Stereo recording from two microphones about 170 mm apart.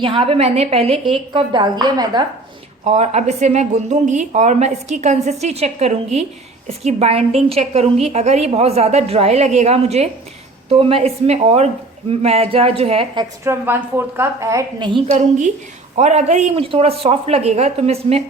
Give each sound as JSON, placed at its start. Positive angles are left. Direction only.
{"t": 0.0, "sound": "a woman's voice", "side_deg": -30}
{"t": 2.8, "sound": "a woman's voice", "side_deg": -40}
{"t": 13.4, "sound": "a woman's voice", "side_deg": -15}
{"t": 15.0, "sound": "a woman's voice", "side_deg": -45}